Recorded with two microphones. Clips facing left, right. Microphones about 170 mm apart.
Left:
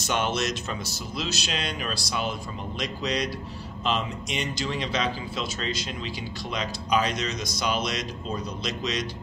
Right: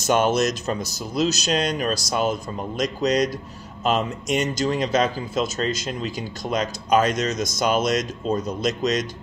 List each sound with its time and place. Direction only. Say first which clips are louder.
0.0 s a man's voice: right 7 dB; 45° right (ahead or behind)